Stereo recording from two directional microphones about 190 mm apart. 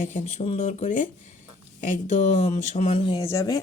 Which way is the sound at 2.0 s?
35° left (ahead or behind).